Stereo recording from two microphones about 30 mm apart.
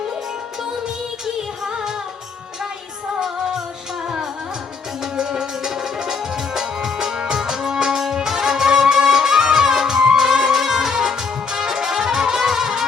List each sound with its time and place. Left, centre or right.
5.3 s music: centre